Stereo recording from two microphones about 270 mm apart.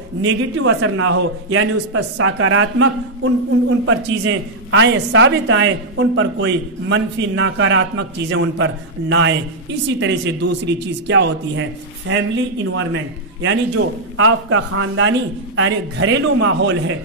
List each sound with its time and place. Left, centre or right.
0.2 s a woman's voice: right